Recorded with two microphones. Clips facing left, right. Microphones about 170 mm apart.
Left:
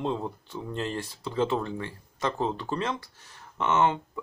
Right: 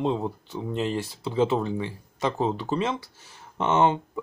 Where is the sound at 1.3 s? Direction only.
15° right (ahead or behind).